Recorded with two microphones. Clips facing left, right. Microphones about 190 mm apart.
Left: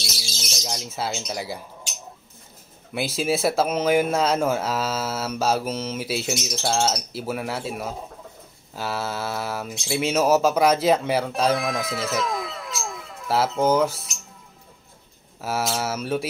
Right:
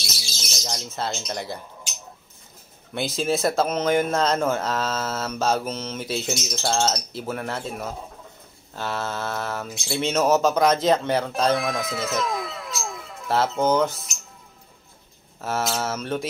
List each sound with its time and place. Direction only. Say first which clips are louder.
0.6 s speech: even; 5° left (ahead or behind)
2.9 s speech: even; 5° left (ahead or behind)
15.4 s speech: even; 5° left (ahead or behind)